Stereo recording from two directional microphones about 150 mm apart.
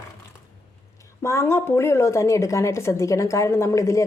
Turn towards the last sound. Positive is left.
turn(degrees=20)  # may be behind; listen again after turning